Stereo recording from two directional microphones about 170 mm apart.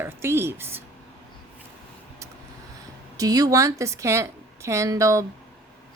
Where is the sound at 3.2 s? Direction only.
20° right (ahead or behind).